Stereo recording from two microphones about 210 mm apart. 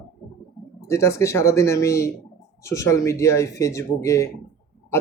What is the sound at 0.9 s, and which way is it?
Speech, 15° left (ahead or behind).